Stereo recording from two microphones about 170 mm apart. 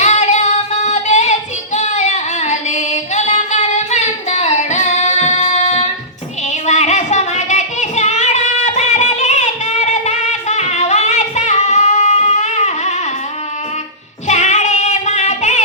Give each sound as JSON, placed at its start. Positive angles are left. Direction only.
{"t": 0.0, "sound": "child singing", "side_deg": 40}
{"t": 6.5, "sound": "a sound", "side_deg": 45}
{"t": 14.3, "sound": "music", "side_deg": 45}